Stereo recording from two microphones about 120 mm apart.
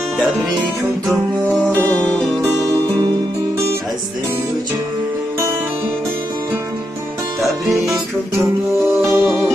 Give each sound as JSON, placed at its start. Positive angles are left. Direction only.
{"t": 7.7, "sound": "music", "side_deg": -25}
{"t": 8.8, "sound": "music", "side_deg": -15}